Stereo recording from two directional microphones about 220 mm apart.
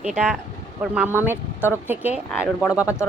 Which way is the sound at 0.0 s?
5° right (ahead or behind).